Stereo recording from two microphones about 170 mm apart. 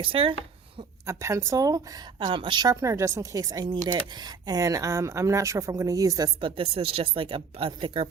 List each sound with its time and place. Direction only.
0.0 s speech: 30° right (ahead or behind)
1.0 s speech: 15° right (ahead or behind); by 8.0 s 30° right (ahead or behind)